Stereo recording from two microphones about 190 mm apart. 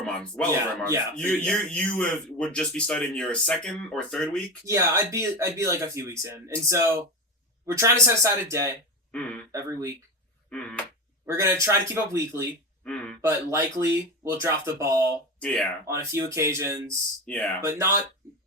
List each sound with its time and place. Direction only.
0.0 s speech: 5° left (ahead or behind)
4.6 s speech: 15° right (ahead or behind)
10.5 s speech: 5° left (ahead or behind)
11.3 s speech: 15° right (ahead or behind)
12.8 s speech: 5° left (ahead or behind)
13.2 s speech: 15° right (ahead or behind)
15.4 s speech: 5° left (ahead or behind)
15.9 s speech: 15° right (ahead or behind)
17.2 s speech: 5° left (ahead or behind)
17.6 s speech: 15° right (ahead or behind)